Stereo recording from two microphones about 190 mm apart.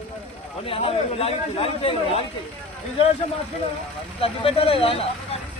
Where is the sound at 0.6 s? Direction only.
30° left (ahead or behind).